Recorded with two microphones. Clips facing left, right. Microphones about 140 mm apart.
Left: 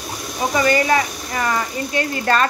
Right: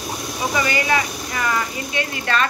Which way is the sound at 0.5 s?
40° left (ahead or behind).